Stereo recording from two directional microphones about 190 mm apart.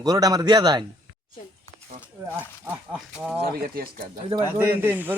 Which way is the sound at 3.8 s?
50° right (ahead or behind).